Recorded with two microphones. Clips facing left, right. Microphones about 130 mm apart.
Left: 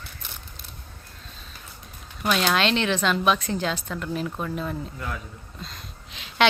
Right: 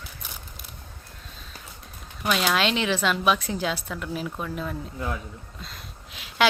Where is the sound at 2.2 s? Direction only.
5° right (ahead or behind).